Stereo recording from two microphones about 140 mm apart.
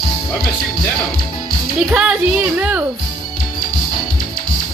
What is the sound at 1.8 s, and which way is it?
Speech, 10° right (ahead or behind).